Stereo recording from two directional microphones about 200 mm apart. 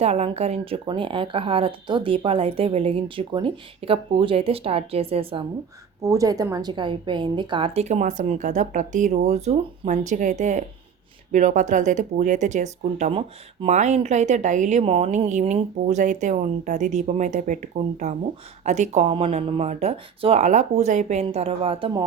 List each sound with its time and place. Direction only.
0.0 s a woman's voice: 30° right (ahead or behind)
6.0 s speech: 15° right (ahead or behind)